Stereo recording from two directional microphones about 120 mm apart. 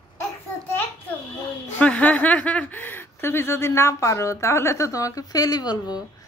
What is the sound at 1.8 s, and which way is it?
Speech, 10° left (ahead or behind).